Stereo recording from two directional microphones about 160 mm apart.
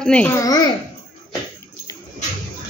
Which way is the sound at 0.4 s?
25° left (ahead or behind).